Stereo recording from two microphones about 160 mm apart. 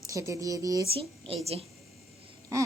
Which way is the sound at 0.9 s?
35° right (ahead or behind).